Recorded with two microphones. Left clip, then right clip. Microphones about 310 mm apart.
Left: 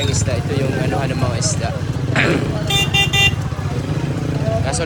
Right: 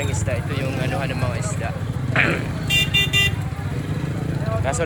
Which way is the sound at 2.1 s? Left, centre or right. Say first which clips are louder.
Left 2 dB; centre.